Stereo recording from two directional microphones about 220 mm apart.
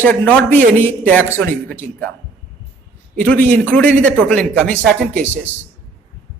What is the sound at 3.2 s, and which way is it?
A man's voice, 5° left (ahead or behind).